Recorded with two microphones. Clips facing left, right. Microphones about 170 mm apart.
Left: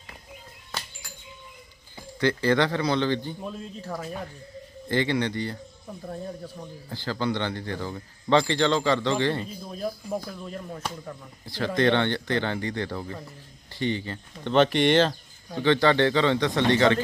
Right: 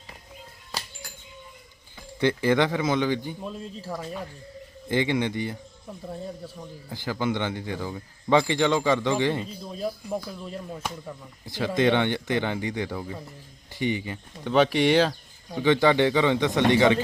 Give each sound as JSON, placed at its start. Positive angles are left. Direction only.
{"t": 2.2, "sound": "speech", "side_deg": -20}
{"t": 3.8, "sound": "speech", "side_deg": 0}
{"t": 4.9, "sound": "speech", "side_deg": -15}
{"t": 6.1, "sound": "speech", "side_deg": 0}
{"t": 6.9, "sound": "speech", "side_deg": -15}
{"t": 11.4, "sound": "speech", "side_deg": -20}